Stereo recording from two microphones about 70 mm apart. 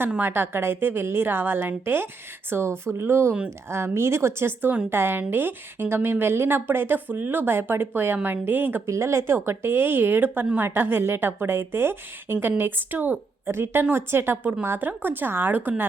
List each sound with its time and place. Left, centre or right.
0.2 s speech: right
8.9 s speech: right